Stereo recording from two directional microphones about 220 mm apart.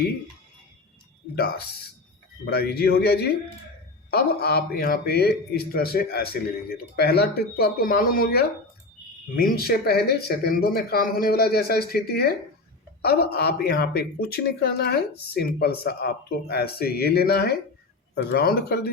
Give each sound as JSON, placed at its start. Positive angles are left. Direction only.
{"t": 2.5, "sound": "speech", "side_deg": 45}